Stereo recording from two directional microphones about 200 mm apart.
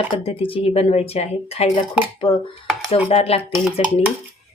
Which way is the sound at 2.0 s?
5° right (ahead or behind).